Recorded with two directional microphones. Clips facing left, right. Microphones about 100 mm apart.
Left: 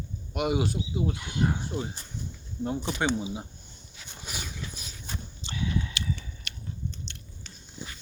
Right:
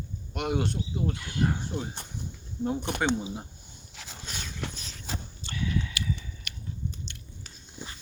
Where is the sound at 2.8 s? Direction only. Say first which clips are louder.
Even; 55° right (ahead or behind).